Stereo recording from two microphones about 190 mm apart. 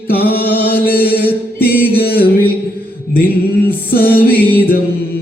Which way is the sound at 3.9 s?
50° left (ahead or behind).